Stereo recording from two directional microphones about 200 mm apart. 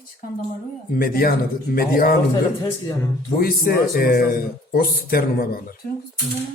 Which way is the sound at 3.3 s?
45° left (ahead or behind).